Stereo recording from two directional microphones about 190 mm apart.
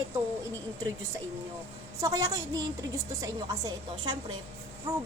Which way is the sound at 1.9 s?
15° right (ahead or behind).